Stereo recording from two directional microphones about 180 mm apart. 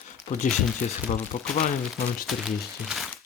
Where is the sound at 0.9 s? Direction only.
40° left (ahead or behind).